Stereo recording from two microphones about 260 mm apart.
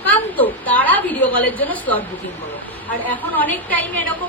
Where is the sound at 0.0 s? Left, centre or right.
Centre.